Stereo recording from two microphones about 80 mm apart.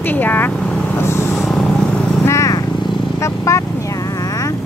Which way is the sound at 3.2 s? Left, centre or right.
Left.